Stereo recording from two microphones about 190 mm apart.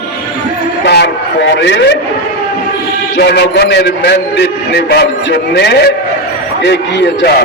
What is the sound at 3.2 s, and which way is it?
A man's voice, 60° left (ahead or behind).